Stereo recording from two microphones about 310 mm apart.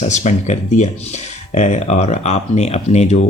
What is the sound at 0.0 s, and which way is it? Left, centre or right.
Speech, left.